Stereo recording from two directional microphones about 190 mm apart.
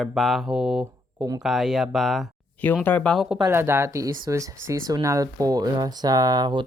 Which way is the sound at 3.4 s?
15° right (ahead or behind).